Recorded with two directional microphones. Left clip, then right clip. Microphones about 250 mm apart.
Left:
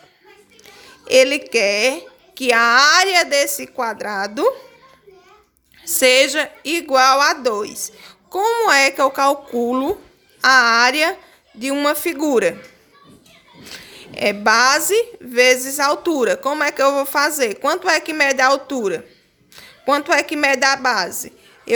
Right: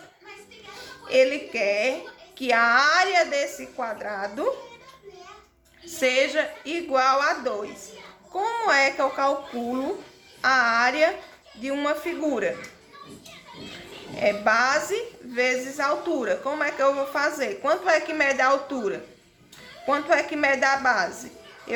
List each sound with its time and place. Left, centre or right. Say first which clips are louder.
1.0 s a woman's voice: left 7 dB; left
5.8 s a woman's voice: left 9 dB; left
13.7 s a woman's voice: left 5 dB; left